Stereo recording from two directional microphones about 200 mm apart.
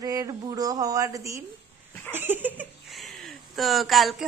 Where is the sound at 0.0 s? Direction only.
15° right (ahead or behind).